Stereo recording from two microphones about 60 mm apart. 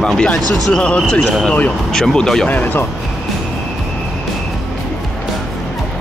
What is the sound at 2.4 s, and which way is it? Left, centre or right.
Speech, left.